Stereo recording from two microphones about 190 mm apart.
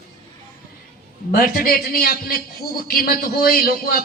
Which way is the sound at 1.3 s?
50° left (ahead or behind).